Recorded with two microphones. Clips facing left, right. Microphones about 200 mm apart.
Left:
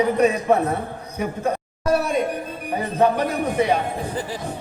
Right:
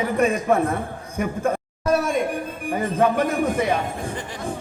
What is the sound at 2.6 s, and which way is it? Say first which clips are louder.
Music: left 1 dB; 50° right (ahead or behind).